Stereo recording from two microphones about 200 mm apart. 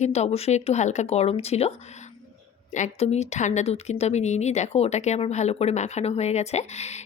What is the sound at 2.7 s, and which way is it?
Speech, 35° left (ahead or behind).